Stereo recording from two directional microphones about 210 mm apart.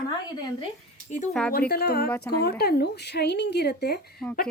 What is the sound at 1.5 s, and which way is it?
Speech, 45° left (ahead or behind).